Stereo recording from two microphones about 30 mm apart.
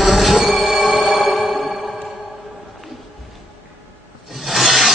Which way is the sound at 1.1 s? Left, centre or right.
Centre.